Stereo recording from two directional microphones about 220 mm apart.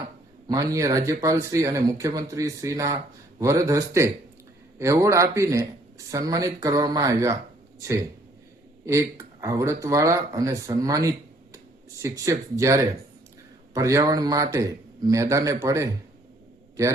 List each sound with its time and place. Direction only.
0.4 s speech: 15° right (ahead or behind)
8.9 s speech: 15° right (ahead or behind)